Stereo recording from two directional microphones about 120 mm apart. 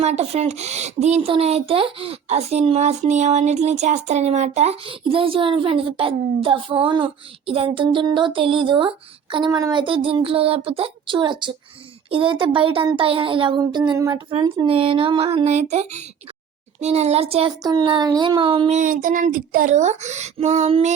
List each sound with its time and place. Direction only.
0.0 s speech: 65° right (ahead or behind); by 9.5 s 45° right (ahead or behind)
9.5 s a child's voice: 30° right (ahead or behind)
9.7 s speech: 45° right (ahead or behind)
14.7 s speech: 50° right (ahead or behind)
15.7 s a child's voice: 70° right (ahead or behind)
17.6 s speech: 35° right (ahead or behind)
18.7 s speech: 90° right; by 20.7 s 75° right (ahead or behind)